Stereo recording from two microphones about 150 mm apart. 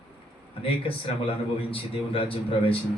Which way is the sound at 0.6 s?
35° left (ahead or behind).